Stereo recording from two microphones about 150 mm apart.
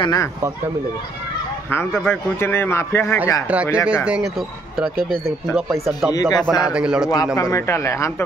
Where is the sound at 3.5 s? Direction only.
10° right (ahead or behind).